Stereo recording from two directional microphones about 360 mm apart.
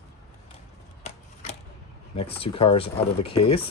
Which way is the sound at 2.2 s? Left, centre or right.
Centre.